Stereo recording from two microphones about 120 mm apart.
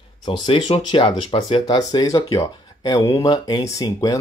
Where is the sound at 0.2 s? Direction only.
40° left (ahead or behind).